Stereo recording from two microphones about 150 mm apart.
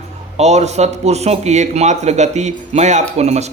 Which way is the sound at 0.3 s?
50° right (ahead or behind).